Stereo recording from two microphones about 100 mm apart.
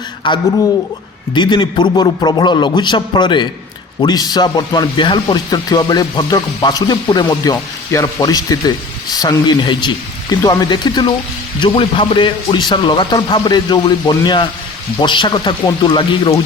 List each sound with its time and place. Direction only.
0.2 s speech: 50° left (ahead or behind)
7.5 s speech: 30° left (ahead or behind)
8.2 s speech: 40° left (ahead or behind)
11.6 s speech: 60° left (ahead or behind)